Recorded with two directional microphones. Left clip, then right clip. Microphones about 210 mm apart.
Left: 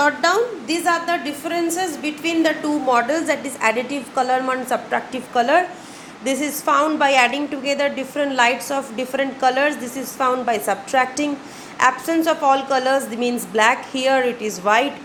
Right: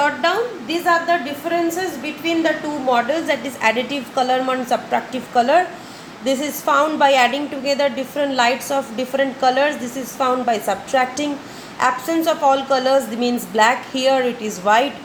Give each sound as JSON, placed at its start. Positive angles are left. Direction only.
{"t": 0.0, "sound": "a sound", "side_deg": 35}
{"t": 2.2, "sound": "a woman's voice", "side_deg": 40}
{"t": 2.9, "sound": "a woman's voice", "side_deg": 25}